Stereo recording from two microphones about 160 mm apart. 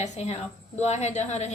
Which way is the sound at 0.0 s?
45° left (ahead or behind).